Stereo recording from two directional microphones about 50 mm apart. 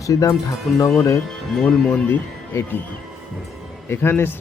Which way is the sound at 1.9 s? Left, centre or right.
Left.